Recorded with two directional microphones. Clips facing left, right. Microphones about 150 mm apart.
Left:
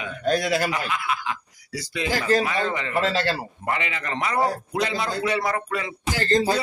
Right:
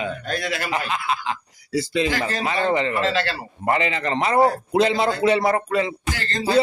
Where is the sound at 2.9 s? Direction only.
40° left (ahead or behind).